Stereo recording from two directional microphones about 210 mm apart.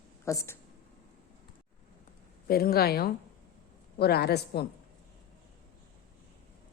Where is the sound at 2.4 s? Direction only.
45° left (ahead or behind).